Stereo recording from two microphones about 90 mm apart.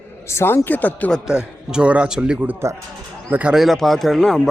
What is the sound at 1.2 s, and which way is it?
A man's voice, 10° right (ahead or behind).